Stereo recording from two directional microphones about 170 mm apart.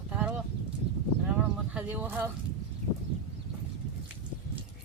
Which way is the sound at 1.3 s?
10° right (ahead or behind).